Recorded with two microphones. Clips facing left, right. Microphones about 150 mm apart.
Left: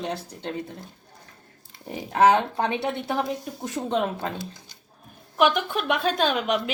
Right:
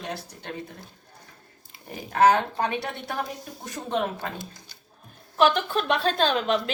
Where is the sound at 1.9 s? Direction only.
25° left (ahead or behind).